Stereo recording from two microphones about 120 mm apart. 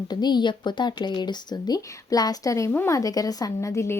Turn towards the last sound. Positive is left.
turn(degrees=25)  # may be behind; listen again after turning